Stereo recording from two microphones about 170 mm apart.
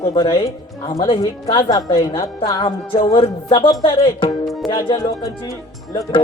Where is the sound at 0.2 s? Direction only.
25° left (ahead or behind).